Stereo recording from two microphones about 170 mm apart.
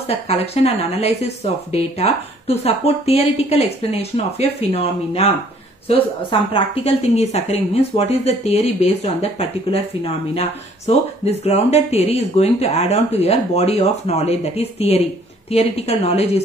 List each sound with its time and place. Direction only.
0.3 s speech: 40° left (ahead or behind)
6.5 s speech: 35° left (ahead or behind)